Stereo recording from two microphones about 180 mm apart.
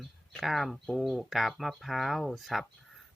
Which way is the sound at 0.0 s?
Centre (ahead or behind).